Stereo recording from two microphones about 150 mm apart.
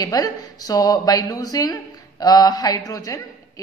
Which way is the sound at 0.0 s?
25° left (ahead or behind).